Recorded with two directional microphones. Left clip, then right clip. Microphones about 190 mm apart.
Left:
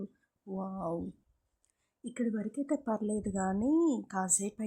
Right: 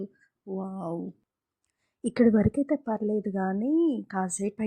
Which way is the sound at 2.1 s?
30° right (ahead or behind).